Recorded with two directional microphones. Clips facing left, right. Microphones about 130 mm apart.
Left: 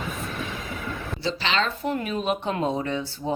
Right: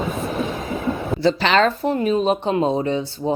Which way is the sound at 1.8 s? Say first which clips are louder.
Right 8 dB; 30° right (ahead or behind).